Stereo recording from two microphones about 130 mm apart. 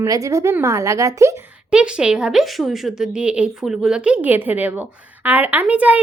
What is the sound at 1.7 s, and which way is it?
A woman's voice, 10° right (ahead or behind).